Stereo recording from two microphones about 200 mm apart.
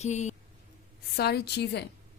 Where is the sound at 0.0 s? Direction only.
35° left (ahead or behind).